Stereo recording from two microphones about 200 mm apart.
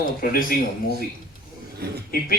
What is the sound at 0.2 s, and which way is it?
Speech, 45° left (ahead or behind).